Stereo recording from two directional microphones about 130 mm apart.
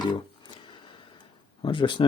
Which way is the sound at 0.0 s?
35° left (ahead or behind).